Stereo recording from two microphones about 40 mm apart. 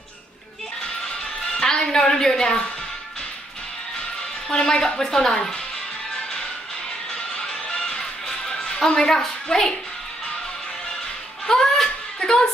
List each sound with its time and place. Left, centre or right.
1.6 s a woman's voice: centre
4.5 s a woman's voice: centre
7.3 s music: centre
11.4 s a sound: centre